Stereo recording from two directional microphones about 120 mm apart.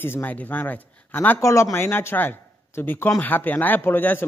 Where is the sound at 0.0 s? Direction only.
15° left (ahead or behind).